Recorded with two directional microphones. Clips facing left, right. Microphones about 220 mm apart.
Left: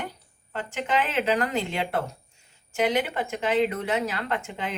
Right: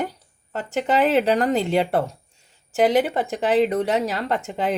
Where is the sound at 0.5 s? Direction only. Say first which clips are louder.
Right 5 dB; 40° right (ahead or behind).